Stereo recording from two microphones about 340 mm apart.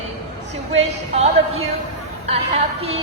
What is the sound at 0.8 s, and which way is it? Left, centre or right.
A woman's voice, centre.